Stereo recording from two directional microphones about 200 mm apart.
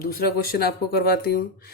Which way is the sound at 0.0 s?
50° left (ahead or behind).